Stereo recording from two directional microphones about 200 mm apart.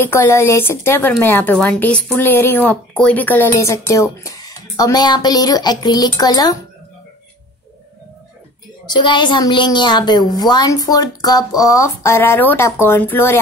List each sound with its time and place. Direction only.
0.0 s speech: 15° left (ahead or behind)
8.8 s speech: 20° left (ahead or behind)